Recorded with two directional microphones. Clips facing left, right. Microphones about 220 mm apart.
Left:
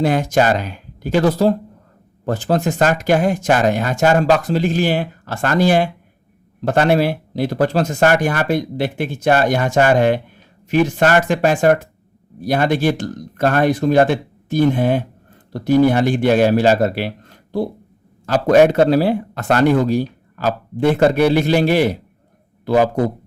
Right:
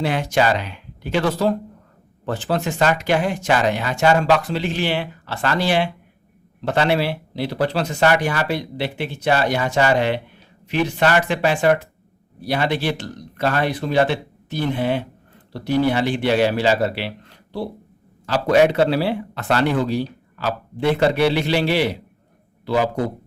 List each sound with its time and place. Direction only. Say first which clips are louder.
0.0 s a man's voice: left 4 dB; 45° left (ahead or behind)